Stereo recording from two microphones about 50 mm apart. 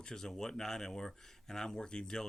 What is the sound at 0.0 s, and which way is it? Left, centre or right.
Speech, centre.